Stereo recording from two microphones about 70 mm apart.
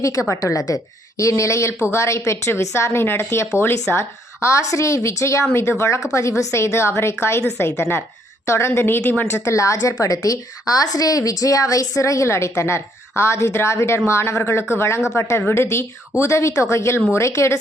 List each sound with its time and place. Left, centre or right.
0.0 s a woman's voice: left